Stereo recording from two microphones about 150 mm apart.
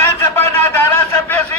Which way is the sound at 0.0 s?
15° left (ahead or behind).